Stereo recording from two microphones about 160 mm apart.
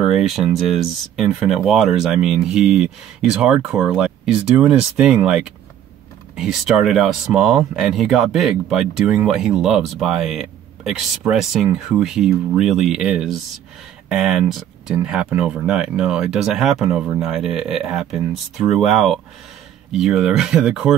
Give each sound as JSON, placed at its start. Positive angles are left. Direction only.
{"t": 0.0, "sound": "speech", "side_deg": 0}